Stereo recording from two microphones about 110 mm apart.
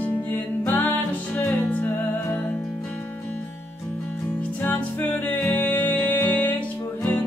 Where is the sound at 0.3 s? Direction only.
20° left (ahead or behind).